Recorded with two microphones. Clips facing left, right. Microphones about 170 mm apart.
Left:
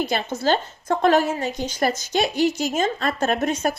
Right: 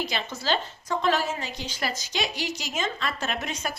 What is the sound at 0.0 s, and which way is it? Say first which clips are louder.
A woman's voice: left 8 dB; 50° left (ahead or behind).